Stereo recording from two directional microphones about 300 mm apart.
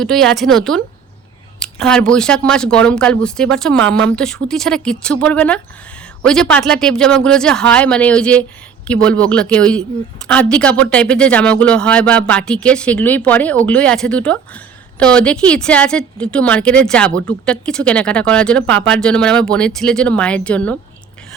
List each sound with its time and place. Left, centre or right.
0.0 s speech: centre